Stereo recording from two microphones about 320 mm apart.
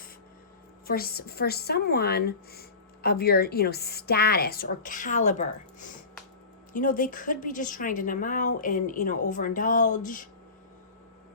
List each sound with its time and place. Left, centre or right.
0.9 s a woman's voice: left